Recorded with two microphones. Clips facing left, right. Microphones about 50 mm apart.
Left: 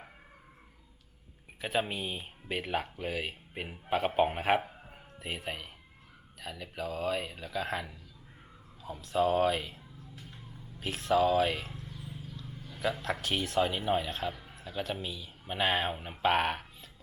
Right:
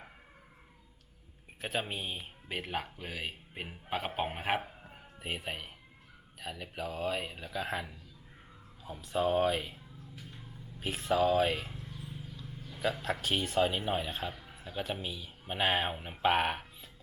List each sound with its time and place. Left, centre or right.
1.6 s speech: centre
11.8 s a sound: centre
12.7 s a man's voice: centre
14.5 s speech: centre